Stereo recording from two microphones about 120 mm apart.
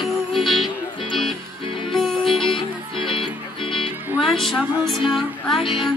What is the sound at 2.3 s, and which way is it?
Music, 45° left (ahead or behind).